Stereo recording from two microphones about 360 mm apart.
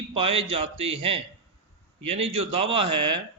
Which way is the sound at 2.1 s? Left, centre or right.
Centre.